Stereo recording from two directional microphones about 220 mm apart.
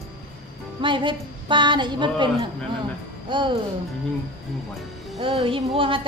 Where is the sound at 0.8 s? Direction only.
20° right (ahead or behind).